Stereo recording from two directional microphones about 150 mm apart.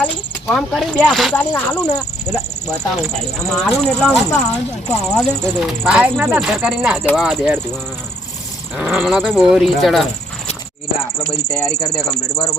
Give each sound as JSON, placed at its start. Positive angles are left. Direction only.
{"t": 0.0, "sound": "speech", "side_deg": 0}
{"t": 8.8, "sound": "speech", "side_deg": -10}
{"t": 11.5, "sound": "speech", "side_deg": 20}